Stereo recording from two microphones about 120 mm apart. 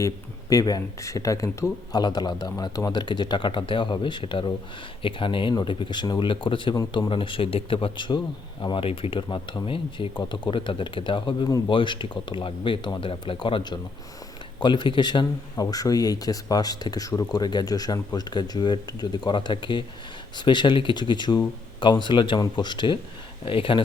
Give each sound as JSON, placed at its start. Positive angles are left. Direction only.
{"t": 0.5, "sound": "speech", "side_deg": 30}
{"t": 6.7, "sound": "speech", "side_deg": 30}
{"t": 7.1, "sound": "speech", "side_deg": 45}